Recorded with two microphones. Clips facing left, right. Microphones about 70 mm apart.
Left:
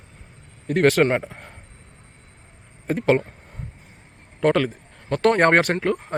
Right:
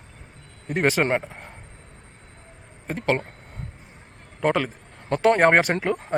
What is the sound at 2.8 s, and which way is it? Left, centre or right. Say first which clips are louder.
Speech: left 5 dB; centre.